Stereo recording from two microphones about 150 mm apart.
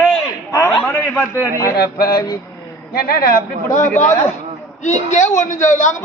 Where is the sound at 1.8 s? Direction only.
90° left.